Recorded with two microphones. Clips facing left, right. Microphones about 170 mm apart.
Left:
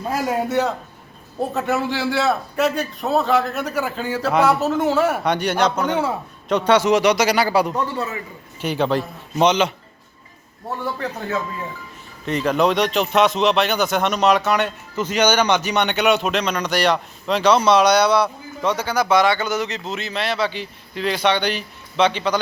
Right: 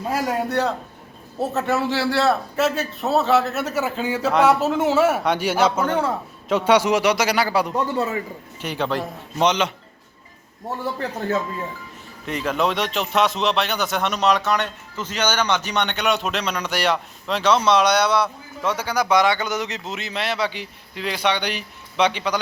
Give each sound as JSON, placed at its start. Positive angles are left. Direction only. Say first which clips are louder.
{"t": 0.2, "sound": "speech", "louder": "left 3 dB", "side_deg": 0}
{"t": 7.9, "sound": "a man's voice", "louder": "right 3 dB", "side_deg": -35}
{"t": 8.6, "sound": "a man's voice", "louder": "left 4 dB", "side_deg": 30}
{"t": 9.4, "sound": "speech", "louder": "left 3 dB", "side_deg": 5}
{"t": 12.2, "sound": "speech", "louder": "left 4 dB", "side_deg": -5}